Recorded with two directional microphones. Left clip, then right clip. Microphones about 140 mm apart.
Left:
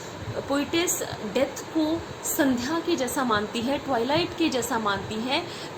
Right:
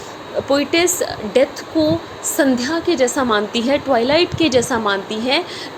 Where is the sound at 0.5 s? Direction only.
35° right (ahead or behind).